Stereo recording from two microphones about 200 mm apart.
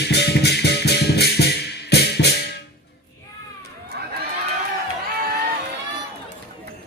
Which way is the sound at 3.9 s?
55° right (ahead or behind).